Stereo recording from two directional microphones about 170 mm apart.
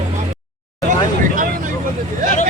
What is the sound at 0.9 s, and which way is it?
Vehicle, 50° right (ahead or behind).